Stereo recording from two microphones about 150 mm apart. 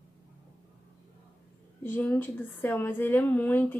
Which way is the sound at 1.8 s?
10° left (ahead or behind).